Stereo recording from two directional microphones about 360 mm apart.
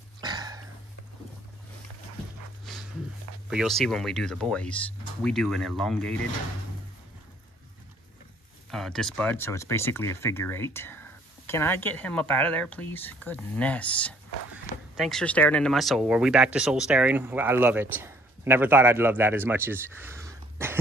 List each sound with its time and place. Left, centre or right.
0.2 s a sound: centre
2.6 s dog: centre
3.4 s speech: centre
8.6 s speech: centre